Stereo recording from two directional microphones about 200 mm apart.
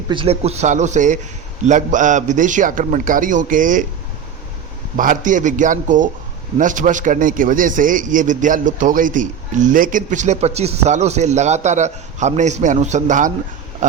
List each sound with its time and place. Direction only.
0.1 s a man's voice: 25° right (ahead or behind)
4.9 s a man's voice: 40° right (ahead or behind)